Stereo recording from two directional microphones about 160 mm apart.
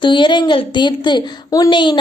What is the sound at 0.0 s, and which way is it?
A woman's voice, 30° left (ahead or behind).